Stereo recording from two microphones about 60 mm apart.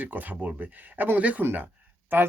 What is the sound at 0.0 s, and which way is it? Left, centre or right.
Speech, right.